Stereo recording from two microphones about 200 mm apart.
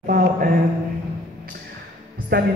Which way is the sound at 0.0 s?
45° right (ahead or behind).